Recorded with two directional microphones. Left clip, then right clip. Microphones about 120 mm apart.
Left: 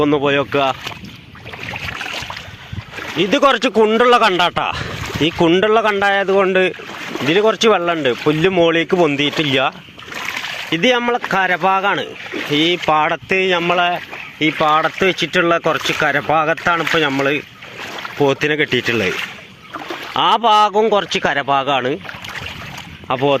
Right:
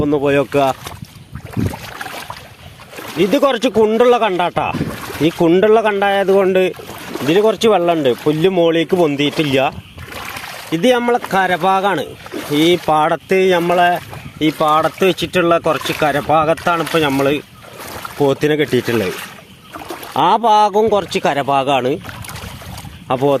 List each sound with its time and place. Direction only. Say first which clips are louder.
0.0 s speech: even; 10° right (ahead or behind)
3.2 s speech: even; 20° right (ahead or behind)
7.3 s speech: right 1 dB; 15° right (ahead or behind)
8.3 s speech: left 1 dB; 30° right (ahead or behind)
10.7 s speech: right 2 dB; 15° right (ahead or behind)
12.5 s speech: right 2 dB; 25° right (ahead or behind)
13.1 s speech: right 2 dB; 55° right (ahead or behind)
14.4 s speech: even; 40° right (ahead or behind)
14.9 s speech: even; 15° right (ahead or behind)
20.1 s speech: right 1 dB; 20° right (ahead or behind)
23.0 s speech: right 1 dB; 55° right (ahead or behind)